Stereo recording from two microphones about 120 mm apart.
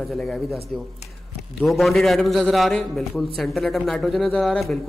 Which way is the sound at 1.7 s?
Centre (ahead or behind).